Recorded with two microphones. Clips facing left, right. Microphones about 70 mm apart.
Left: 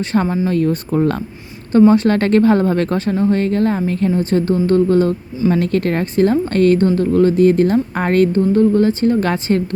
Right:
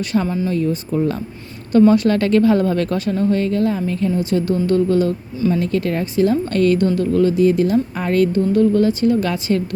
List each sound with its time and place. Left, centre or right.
0.0 s speech: left
0.5 s a woman's voice: left
1.9 s speech: left
5.5 s a woman's voice: left